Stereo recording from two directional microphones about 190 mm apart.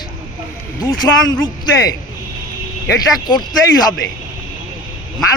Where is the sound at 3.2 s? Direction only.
20° left (ahead or behind).